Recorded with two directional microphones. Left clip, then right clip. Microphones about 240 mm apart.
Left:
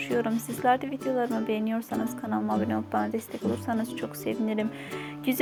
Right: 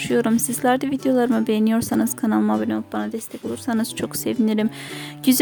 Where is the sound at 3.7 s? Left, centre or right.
Right.